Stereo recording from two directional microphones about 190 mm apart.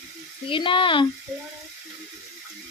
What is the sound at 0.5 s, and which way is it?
Speech, 25° left (ahead or behind).